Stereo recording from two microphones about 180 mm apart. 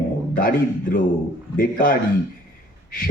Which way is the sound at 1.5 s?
50° left (ahead or behind).